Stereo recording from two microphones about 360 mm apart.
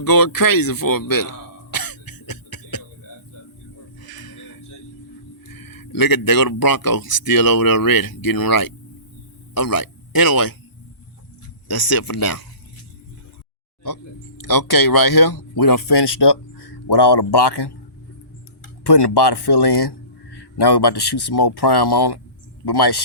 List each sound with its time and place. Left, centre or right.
0.0 s a sound: left
4.0 s music: left
5.5 s speech: left
11.7 s speech: left
14.4 s speech: left
18.8 s speech: left